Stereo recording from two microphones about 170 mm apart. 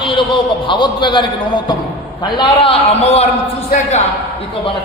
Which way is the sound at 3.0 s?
35° left (ahead or behind).